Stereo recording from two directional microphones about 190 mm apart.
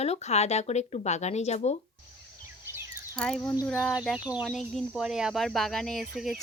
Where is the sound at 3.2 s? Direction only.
5° left (ahead or behind).